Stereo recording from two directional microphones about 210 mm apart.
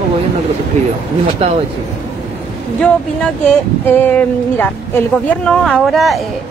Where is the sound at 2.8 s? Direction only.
5° left (ahead or behind).